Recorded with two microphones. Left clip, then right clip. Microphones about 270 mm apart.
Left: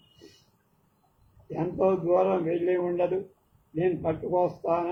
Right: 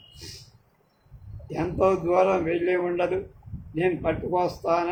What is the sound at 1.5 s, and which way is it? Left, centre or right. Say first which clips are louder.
A man's voice: right 3 dB; right.